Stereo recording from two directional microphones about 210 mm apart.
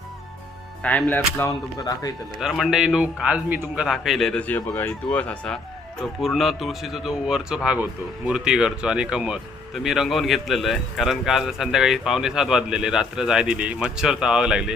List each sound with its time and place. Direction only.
0.8 s speech: 5° left (ahead or behind)
2.4 s speech: centre (ahead or behind)